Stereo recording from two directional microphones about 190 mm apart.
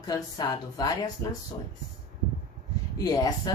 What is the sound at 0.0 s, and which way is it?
Speech, 20° left (ahead or behind).